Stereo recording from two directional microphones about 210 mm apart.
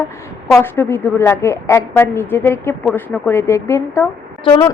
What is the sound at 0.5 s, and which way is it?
A woman's voice, 10° left (ahead or behind).